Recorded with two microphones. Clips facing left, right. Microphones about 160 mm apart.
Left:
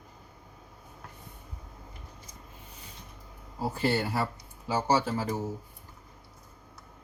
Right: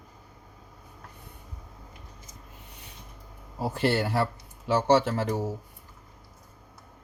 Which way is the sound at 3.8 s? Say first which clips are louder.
Right 3 dB; 80° right.